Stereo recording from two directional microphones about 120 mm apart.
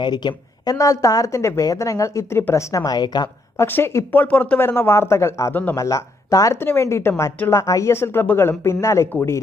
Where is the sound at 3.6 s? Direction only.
20° left (ahead or behind).